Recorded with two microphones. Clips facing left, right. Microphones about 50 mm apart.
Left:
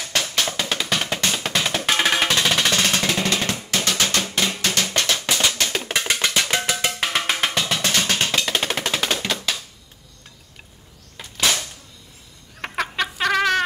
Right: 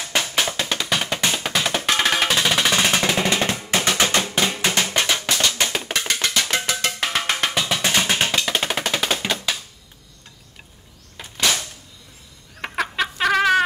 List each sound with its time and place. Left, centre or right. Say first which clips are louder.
0.1 s drum: right 1 dB; centre
0.7 s music: right 1 dB; centre
2.8 s drum: right 2 dB; centre
5.6 s music: right 2 dB; centre
6.1 s music: even; centre
6.5 s cowbell: even; centre
8.4 s music: even; centre
11.1 s cap gun: even; centre
12.5 s chicken: right 1 dB; centre